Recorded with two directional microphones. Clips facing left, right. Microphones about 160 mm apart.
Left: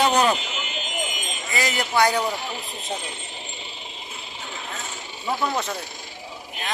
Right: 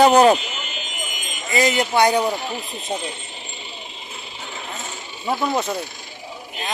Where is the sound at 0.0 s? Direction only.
40° right (ahead or behind).